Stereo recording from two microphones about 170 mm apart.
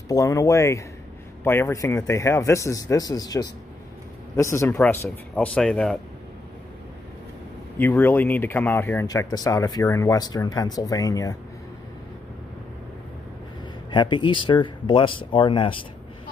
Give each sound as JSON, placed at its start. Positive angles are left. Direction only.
{"t": 0.1, "sound": "speech", "side_deg": 20}
{"t": 7.8, "sound": "speech", "side_deg": 10}
{"t": 13.8, "sound": "speech", "side_deg": 25}